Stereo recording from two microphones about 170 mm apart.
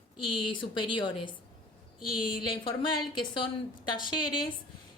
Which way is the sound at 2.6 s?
30° left (ahead or behind).